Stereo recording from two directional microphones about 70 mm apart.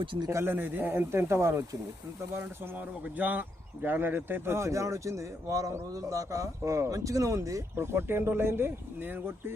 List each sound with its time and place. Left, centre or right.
0.3 s a man's voice: right
0.5 s speech: right
4.5 s a man's voice: right
7.8 s speech: right